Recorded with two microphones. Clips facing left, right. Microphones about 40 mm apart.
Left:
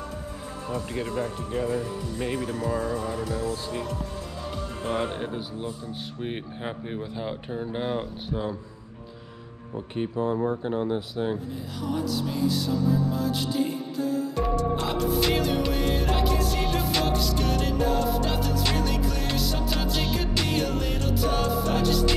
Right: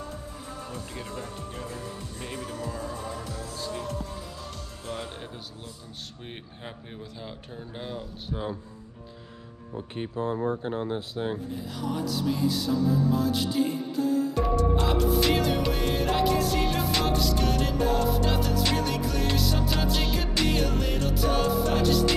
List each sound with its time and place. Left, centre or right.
0.9 s speech: left
11.9 s music: centre